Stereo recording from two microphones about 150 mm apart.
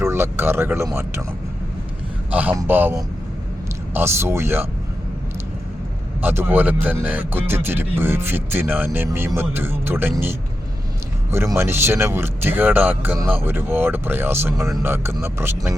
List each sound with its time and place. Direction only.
0.0 s speech: 15° right (ahead or behind)
2.3 s speech: 10° right (ahead or behind)
6.2 s speech: 15° right (ahead or behind)